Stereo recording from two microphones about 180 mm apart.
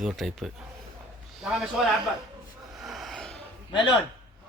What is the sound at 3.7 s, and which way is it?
Speech, 25° left (ahead or behind).